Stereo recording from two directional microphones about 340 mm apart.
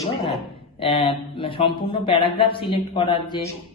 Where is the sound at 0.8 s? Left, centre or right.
Centre.